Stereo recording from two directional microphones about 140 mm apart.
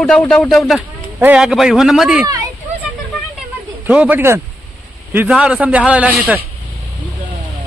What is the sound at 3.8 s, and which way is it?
A man's voice, 10° right (ahead or behind).